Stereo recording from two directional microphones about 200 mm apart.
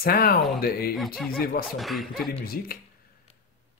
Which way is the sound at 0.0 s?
50° left (ahead or behind).